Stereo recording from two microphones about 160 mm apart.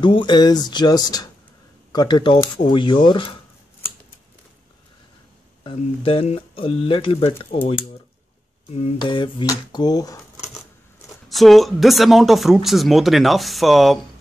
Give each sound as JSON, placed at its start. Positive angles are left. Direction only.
{"t": 0.0, "sound": "speech", "side_deg": 30}
{"t": 5.6, "sound": "speech", "side_deg": 35}
{"t": 8.9, "sound": "speech", "side_deg": 30}
{"t": 11.2, "sound": "speech", "side_deg": 0}